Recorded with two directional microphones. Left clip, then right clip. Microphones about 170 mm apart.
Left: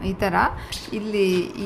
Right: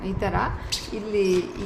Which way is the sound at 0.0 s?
50° left (ahead or behind).